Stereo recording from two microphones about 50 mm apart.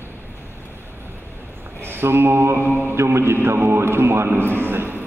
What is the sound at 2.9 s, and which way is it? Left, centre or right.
Mantra, right.